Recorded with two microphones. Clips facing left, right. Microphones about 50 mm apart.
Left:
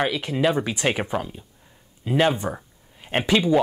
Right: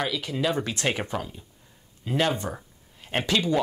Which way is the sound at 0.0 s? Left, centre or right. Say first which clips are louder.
Left 5 dB; left.